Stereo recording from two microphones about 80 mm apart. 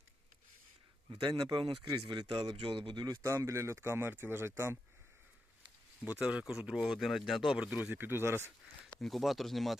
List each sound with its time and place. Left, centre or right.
1.4 s speech: right
3.2 s speech: right
6.1 s speech: centre
6.7 s speech: centre
7.5 s speech: centre; by 8.5 s right
8.8 s speech: centre